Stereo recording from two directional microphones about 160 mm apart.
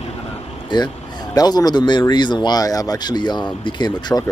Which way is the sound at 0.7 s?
30° left (ahead or behind).